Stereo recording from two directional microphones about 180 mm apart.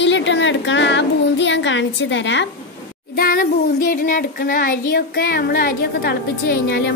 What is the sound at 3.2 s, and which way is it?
Child singing, 55° left (ahead or behind).